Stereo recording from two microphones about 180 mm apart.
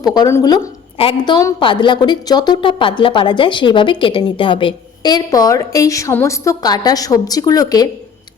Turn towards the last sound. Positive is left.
turn(degrees=20)  # may be behind; listen again after turning